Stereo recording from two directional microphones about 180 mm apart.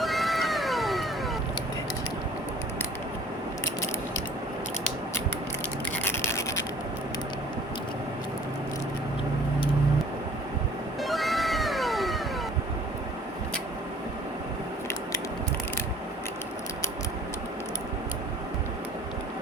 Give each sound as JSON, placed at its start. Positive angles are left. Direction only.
{"t": 0.0, "sound": "cat", "side_deg": 0}
{"t": 6.0, "sound": "toothbrush", "side_deg": 15}
{"t": 11.0, "sound": "cat", "side_deg": 0}